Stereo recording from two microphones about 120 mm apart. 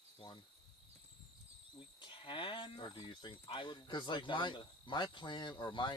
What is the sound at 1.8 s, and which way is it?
Speech, 45° left (ahead or behind).